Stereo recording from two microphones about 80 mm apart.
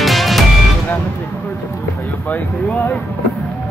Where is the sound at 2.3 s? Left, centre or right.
Centre.